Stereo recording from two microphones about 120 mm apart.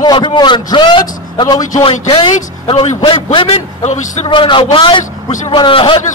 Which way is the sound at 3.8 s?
85° left.